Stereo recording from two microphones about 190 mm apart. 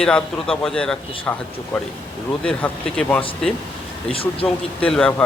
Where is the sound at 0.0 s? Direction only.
5° left (ahead or behind).